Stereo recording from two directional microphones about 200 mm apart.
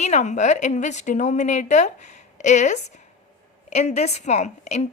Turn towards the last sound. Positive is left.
turn(degrees=35)  # may be behind; listen again after turning